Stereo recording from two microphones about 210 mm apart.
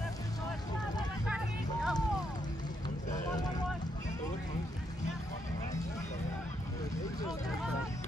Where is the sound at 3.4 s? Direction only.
20° left (ahead or behind).